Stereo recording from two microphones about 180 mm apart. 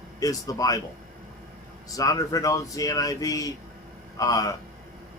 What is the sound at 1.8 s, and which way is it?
Speech, 20° left (ahead or behind).